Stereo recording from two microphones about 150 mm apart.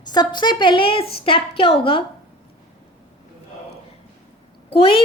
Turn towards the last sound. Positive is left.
turn(degrees=35)  # may be behind; listen again after turning